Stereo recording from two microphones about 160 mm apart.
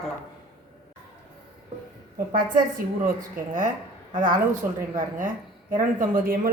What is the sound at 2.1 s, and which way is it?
A woman's voice, 60° right (ahead or behind).